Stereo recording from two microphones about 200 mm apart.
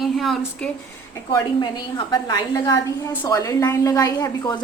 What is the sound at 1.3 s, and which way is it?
A woman's voice, 20° left (ahead or behind).